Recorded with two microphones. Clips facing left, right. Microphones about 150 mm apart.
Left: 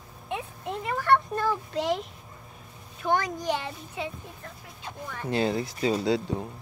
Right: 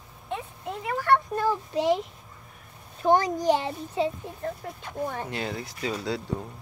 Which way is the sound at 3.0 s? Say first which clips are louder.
Right 5 dB; 35° right (ahead or behind).